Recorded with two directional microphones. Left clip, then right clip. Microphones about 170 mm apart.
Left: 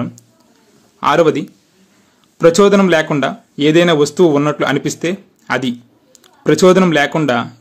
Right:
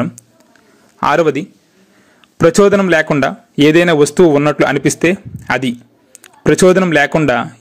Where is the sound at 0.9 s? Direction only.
30° right (ahead or behind).